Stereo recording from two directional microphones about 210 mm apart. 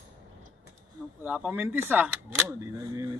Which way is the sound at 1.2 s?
10° right (ahead or behind).